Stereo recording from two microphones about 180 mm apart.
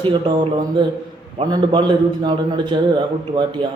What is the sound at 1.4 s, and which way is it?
A man's voice, 25° right (ahead or behind).